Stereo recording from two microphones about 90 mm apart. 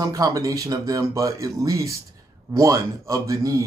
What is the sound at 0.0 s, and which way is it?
Speech, 40° right (ahead or behind).